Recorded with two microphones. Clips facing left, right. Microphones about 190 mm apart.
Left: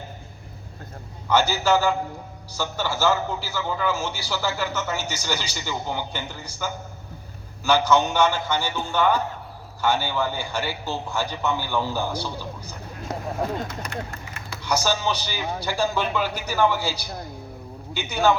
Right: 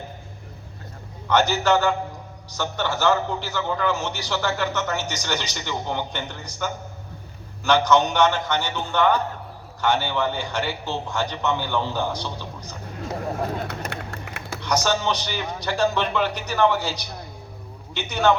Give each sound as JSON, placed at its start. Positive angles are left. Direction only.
{"t": 1.3, "sound": "a man's voice", "side_deg": 10}
{"t": 13.7, "sound": "a sound", "side_deg": -65}
{"t": 14.6, "sound": "a man's voice", "side_deg": 10}